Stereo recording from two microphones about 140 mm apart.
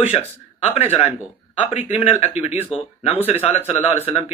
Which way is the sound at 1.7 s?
50° left (ahead or behind).